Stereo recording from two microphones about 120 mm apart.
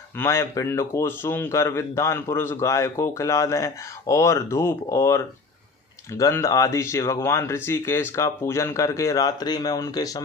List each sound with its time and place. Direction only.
0.2 s speech: 25° left (ahead or behind)